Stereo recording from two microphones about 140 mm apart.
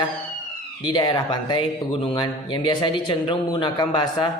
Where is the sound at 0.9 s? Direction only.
30° left (ahead or behind).